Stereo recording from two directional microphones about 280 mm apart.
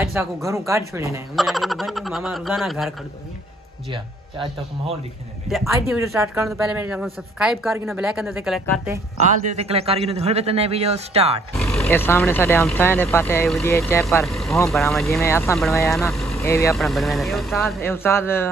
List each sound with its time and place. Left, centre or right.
0.0 s speech: centre
3.9 s speech: centre
9.5 s a man's voice: right
11.5 s speech: centre